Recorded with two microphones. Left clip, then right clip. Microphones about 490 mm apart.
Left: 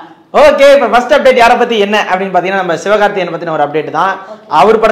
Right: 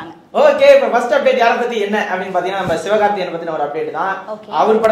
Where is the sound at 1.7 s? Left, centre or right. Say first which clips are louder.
Left 7 dB; left.